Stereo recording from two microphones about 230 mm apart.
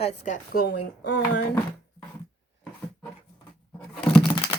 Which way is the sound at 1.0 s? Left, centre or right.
Left.